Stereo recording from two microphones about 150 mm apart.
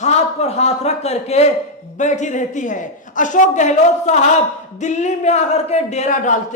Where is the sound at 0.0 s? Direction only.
45° left (ahead or behind).